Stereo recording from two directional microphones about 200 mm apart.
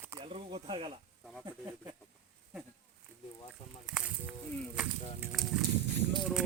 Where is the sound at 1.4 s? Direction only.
15° right (ahead or behind).